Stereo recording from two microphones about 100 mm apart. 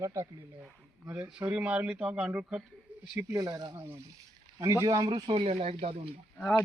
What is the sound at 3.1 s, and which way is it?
Speech, 30° right (ahead or behind).